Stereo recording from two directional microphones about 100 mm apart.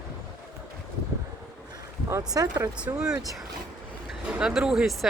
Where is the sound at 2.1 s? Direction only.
40° right (ahead or behind).